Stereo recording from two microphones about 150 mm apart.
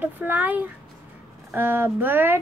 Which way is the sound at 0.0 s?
10° right (ahead or behind).